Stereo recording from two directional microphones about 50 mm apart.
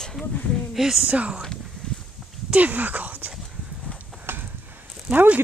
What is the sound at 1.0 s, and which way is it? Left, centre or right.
Speech, right.